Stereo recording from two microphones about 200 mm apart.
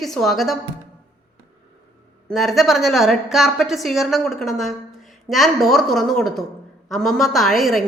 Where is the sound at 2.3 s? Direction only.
Centre (ahead or behind).